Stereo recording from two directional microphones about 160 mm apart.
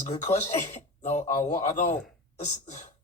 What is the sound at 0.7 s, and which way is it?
A woman's voice, 50° left (ahead or behind).